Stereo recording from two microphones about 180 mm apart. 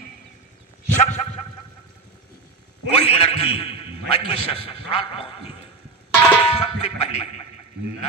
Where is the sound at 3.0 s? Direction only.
30° left (ahead or behind).